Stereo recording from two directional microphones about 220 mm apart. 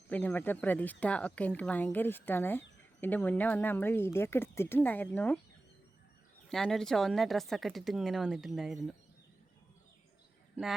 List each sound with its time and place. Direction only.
0.1 s speech: 5° left (ahead or behind)
6.5 s a woman's voice: centre (ahead or behind)